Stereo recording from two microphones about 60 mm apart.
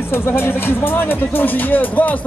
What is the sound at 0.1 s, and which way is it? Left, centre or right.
Speech, left.